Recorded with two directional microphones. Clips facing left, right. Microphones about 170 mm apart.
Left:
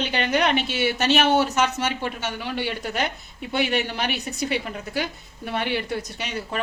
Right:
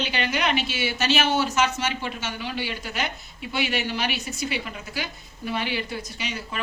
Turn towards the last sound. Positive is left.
turn(degrees=55)  # may be behind; listen again after turning